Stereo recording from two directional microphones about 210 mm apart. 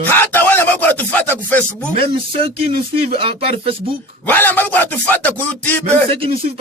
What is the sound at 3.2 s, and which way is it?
Speech, 25° right (ahead or behind).